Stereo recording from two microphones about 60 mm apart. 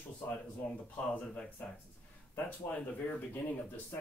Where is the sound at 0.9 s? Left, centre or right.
Left.